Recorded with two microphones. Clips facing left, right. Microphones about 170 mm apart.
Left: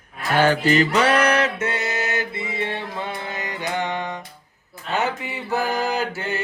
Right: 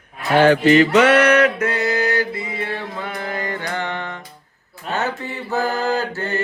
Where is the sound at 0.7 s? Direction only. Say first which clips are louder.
Right 5 dB; 35° left (ahead or behind); by 4.2 s 20° left (ahead or behind).